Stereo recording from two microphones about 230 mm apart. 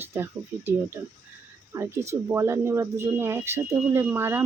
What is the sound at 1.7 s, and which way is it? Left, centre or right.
Speech, centre.